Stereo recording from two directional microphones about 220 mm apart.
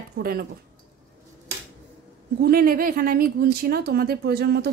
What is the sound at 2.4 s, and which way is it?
Speech, 40° right (ahead or behind).